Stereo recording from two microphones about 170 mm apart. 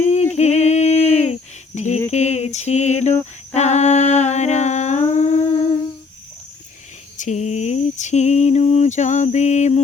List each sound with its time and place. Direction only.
0.1 s humming: 40° left (ahead or behind)
2.0 s cricket: 40° left (ahead or behind)
3.5 s humming: 40° left (ahead or behind)
7.2 s a sound: 45° left (ahead or behind)